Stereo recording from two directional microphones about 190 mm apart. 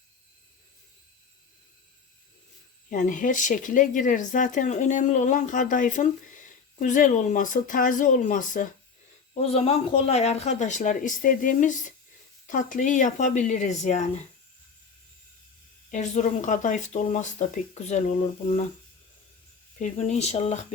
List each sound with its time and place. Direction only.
2.9 s speech: 40° left (ahead or behind)
9.3 s speech: 35° left (ahead or behind)
15.9 s speech: 40° left (ahead or behind)
19.8 s speech: 35° left (ahead or behind)